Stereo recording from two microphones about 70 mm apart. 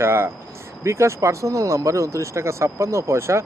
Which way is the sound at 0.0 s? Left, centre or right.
Right.